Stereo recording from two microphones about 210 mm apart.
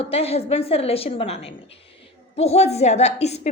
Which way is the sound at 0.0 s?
30° left (ahead or behind).